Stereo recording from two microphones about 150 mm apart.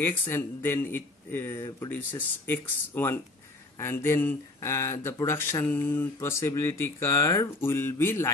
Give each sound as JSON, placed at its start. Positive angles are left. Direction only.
{"t": 0.0, "sound": "speech", "side_deg": 15}